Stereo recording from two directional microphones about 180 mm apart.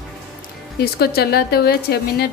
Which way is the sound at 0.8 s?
60° left (ahead or behind).